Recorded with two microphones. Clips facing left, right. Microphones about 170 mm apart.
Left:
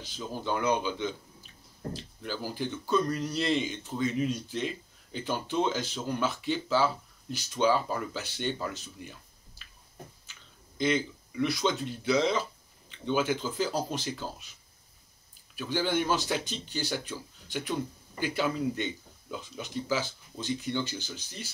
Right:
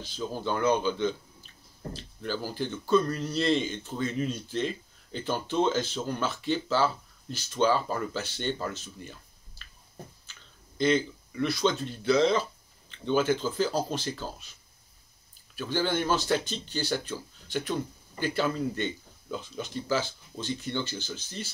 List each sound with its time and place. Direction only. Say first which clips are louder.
0.0 s speech: right 3 dB; 15° left (ahead or behind)
10.8 s speech: right 3 dB; 15° left (ahead or behind)
15.5 s speech: right 1 dB; 15° left (ahead or behind)